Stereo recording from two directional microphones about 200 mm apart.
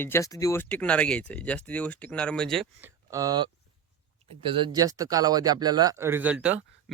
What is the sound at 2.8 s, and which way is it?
Speech, 15° right (ahead or behind).